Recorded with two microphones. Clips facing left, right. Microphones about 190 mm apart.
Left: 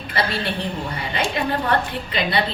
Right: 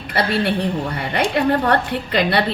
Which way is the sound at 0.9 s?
60° right (ahead or behind).